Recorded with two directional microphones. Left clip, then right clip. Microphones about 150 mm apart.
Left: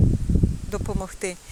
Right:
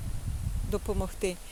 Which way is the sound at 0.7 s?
10° right (ahead or behind).